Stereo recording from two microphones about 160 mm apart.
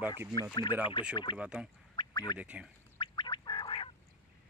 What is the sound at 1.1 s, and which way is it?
Speech, 30° left (ahead or behind).